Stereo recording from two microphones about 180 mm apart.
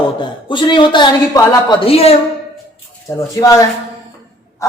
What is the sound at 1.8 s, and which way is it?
Speech, 35° left (ahead or behind).